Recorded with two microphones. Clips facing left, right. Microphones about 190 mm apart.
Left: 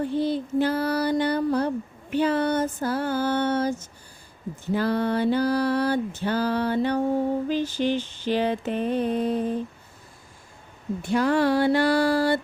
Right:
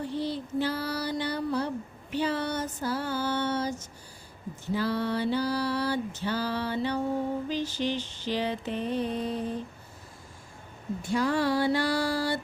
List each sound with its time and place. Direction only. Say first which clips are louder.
0.0 s female singing: left 7 dB; 55° left (ahead or behind)
4.7 s a sound: left 5 dB; 55° left (ahead or behind)
11.0 s female singing: left 5 dB; 60° left (ahead or behind)